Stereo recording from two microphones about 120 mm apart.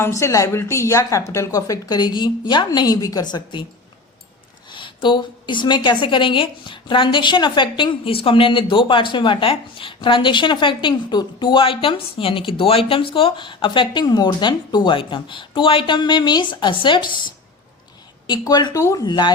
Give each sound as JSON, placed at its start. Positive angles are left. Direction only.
{"t": 0.0, "sound": "a woman's voice", "side_deg": 25}
{"t": 4.7, "sound": "a woman's voice", "side_deg": 45}
{"t": 18.3, "sound": "a woman's voice", "side_deg": 35}
{"t": 19.0, "sound": "speech", "side_deg": 40}